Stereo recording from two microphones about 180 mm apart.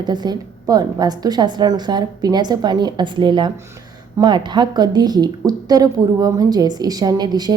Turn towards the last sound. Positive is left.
turn(degrees=-20)  # may be behind; listen again after turning